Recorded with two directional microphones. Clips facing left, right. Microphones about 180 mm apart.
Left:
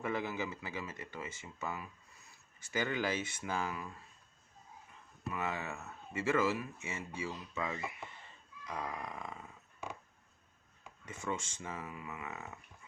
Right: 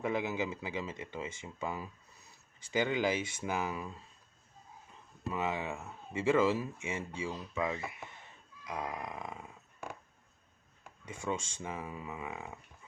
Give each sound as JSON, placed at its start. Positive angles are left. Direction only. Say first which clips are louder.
{"t": 0.0, "sound": "speech", "louder": "right 3 dB", "side_deg": -15}
{"t": 3.7, "sound": "speech", "louder": "right 3 dB", "side_deg": -20}
{"t": 5.4, "sound": "speech", "louder": "right 4 dB", "side_deg": -15}
{"t": 11.0, "sound": "speech", "louder": "right 3 dB", "side_deg": -10}
{"t": 11.9, "sound": "speech", "louder": "right 3 dB", "side_deg": -25}
{"t": 12.2, "sound": "speech", "louder": "right 3 dB", "side_deg": -15}